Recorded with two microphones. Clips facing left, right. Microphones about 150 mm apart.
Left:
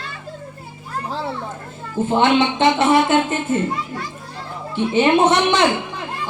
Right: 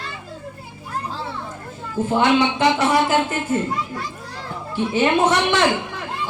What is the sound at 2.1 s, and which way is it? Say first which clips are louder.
Speech: left 1 dB; 25° left (ahead or behind).